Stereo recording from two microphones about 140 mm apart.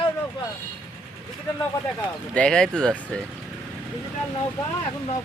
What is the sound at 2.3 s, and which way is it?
Speech, 5° left (ahead or behind).